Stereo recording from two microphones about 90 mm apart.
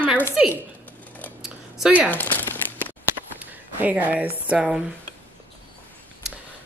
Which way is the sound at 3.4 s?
15° right (ahead or behind).